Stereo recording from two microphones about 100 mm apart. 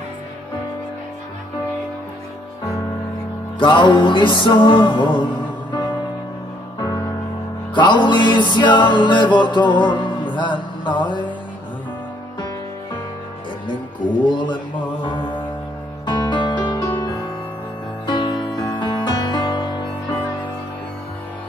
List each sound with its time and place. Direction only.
3.5 s music: 55° left (ahead or behind)
7.7 s music: 50° left (ahead or behind)
14.3 s a sound: 50° left (ahead or behind)
15.0 s music: 55° left (ahead or behind)
18.0 s music: 50° left (ahead or behind)